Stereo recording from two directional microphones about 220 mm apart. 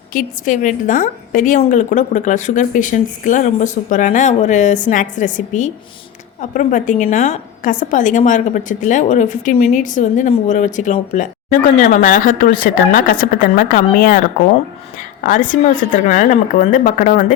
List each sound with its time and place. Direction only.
0.1 s a woman's voice: 35° left (ahead or behind)
15.2 s a woman's voice: 35° left (ahead or behind)